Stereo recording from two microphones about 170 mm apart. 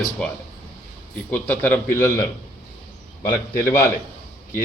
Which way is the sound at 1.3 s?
10° left (ahead or behind).